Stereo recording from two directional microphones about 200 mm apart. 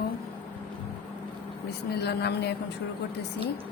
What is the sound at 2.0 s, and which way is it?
Speech, 55° left (ahead or behind).